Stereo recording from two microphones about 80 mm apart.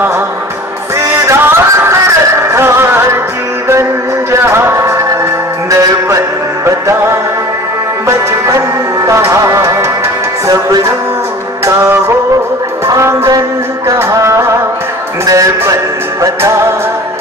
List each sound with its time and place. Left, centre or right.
1.3 s music: right
4.3 s music: right
6.6 s music: right
8.5 s music: right